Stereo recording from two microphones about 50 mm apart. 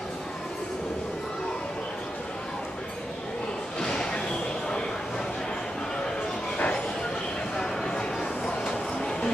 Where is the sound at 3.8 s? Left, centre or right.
Centre.